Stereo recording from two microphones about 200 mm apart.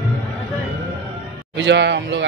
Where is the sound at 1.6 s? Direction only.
60° right (ahead or behind).